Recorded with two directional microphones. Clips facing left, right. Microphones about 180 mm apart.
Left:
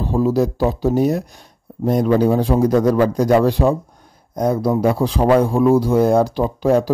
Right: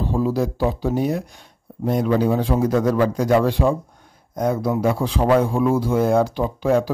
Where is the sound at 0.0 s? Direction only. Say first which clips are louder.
Left 4 dB; 40° left (ahead or behind).